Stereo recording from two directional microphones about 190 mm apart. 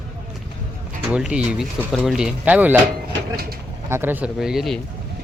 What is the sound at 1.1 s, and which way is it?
Speech, 5° right (ahead or behind).